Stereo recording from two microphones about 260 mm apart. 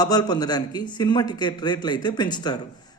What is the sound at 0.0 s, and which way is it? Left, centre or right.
A man's voice, centre.